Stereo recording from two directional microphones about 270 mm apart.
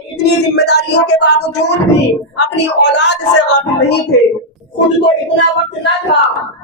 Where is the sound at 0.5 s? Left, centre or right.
Left.